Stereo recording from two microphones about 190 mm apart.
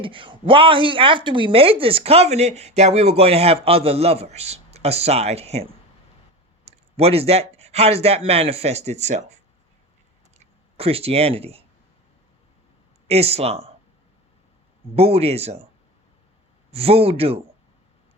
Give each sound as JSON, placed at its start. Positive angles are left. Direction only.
{"t": 0.0, "sound": "speech", "side_deg": -25}
{"t": 10.4, "sound": "speech", "side_deg": -30}
{"t": 13.1, "sound": "speech", "side_deg": -35}
{"t": 14.9, "sound": "speech", "side_deg": -30}
{"t": 16.7, "sound": "speech", "side_deg": -30}